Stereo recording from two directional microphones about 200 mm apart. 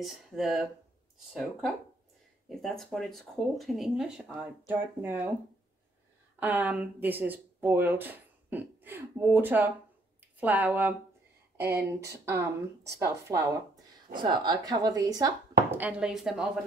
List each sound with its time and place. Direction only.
0.0 s speech: centre (ahead or behind)
6.4 s speech: 10° right (ahead or behind)
12.3 s a woman's voice: 10° right (ahead or behind)
15.8 s speech: 5° right (ahead or behind)